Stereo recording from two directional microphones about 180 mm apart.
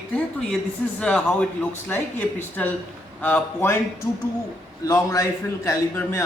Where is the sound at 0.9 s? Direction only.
5° left (ahead or behind).